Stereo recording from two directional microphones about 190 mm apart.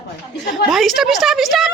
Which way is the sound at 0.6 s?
Centre (ahead or behind).